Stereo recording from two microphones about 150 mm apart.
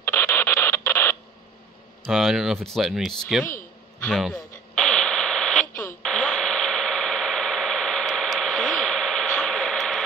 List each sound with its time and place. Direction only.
0.0 s radio: 15° left (ahead or behind)
2.0 s speech: centre (ahead or behind)
4.0 s radio: 5° left (ahead or behind)
6.0 s a sound: 5° left (ahead or behind)